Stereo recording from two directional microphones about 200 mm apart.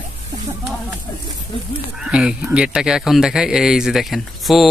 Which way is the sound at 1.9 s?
5° right (ahead or behind).